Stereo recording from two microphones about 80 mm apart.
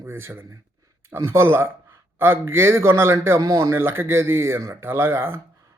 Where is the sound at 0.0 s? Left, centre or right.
Right.